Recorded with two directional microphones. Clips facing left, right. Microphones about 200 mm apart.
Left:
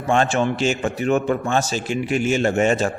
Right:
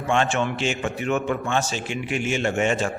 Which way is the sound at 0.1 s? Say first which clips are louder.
Left 4 dB; 40° left (ahead or behind).